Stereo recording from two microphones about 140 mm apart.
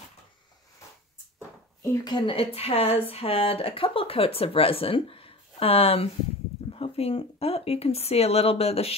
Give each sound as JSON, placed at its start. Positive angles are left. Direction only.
{"t": 1.9, "sound": "speech", "side_deg": 30}